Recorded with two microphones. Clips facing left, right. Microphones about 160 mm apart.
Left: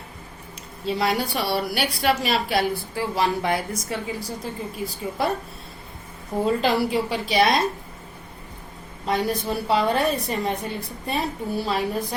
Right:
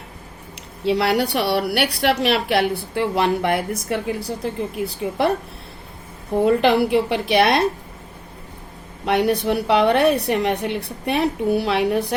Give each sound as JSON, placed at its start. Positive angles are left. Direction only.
{"t": 0.9, "sound": "a woman's voice", "side_deg": -70}
{"t": 6.4, "sound": "a woman's voice", "side_deg": -60}
{"t": 9.0, "sound": "a woman's voice", "side_deg": -65}